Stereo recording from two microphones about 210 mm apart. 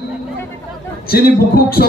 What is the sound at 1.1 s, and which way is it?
Speech, 45° left (ahead or behind).